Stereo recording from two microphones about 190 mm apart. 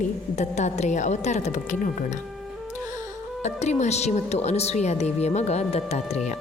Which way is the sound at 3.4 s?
35° left (ahead or behind).